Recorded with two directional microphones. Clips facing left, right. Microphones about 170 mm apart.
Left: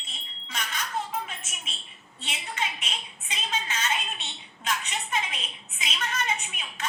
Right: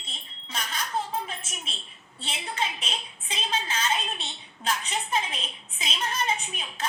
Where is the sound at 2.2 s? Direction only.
30° right (ahead or behind).